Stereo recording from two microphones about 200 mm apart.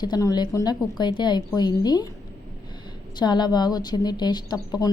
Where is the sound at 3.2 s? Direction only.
20° left (ahead or behind).